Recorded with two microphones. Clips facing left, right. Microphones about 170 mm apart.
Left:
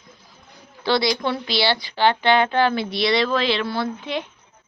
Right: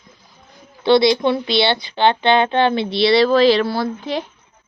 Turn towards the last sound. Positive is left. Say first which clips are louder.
# right 3 dB
turn(degrees=-35)  # may be behind; listen again after turning